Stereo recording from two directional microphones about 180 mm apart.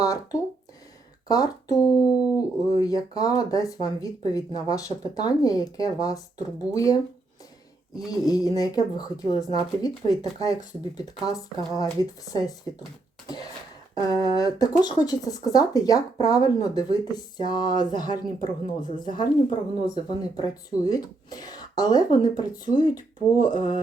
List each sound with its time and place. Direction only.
0.0 s speech: 20° left (ahead or behind)
8.1 s speech: 20° left (ahead or behind)
13.2 s a sound: 20° left (ahead or behind)
13.9 s speech: 20° left (ahead or behind)
23.0 s speech: 45° right (ahead or behind)